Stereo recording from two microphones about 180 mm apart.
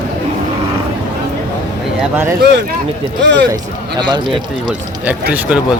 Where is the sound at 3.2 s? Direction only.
75° right (ahead or behind).